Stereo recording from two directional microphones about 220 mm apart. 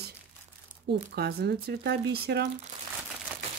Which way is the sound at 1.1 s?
45° right (ahead or behind).